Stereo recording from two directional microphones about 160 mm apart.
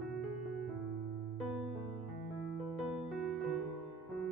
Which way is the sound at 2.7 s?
Centre (ahead or behind).